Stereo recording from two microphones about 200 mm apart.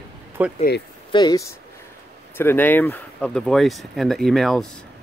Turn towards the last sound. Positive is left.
turn(degrees=0)  # may be behind; listen again after turning